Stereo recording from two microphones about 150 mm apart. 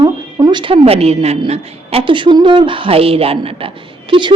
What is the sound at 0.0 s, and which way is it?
A woman's voice, 25° right (ahead or behind).